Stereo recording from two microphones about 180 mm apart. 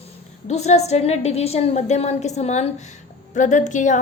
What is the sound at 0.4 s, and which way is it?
A woman's voice, 40° left (ahead or behind).